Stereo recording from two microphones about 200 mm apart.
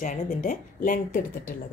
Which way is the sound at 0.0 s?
40° left (ahead or behind).